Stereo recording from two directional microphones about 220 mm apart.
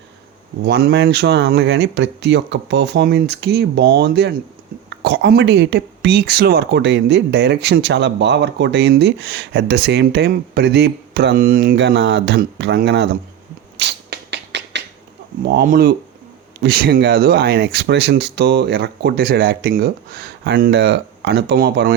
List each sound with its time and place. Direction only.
0.6 s speech: 45° right (ahead or behind)
13.7 s a sound: 50° right (ahead or behind)
15.4 s speech: 40° right (ahead or behind)